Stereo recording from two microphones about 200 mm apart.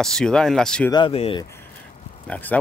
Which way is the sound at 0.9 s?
25° left (ahead or behind).